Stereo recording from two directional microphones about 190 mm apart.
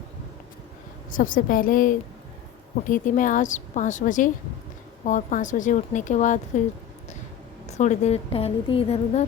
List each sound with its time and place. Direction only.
1.1 s a woman's voice: 45° left (ahead or behind)
7.7 s a woman's voice: 40° left (ahead or behind)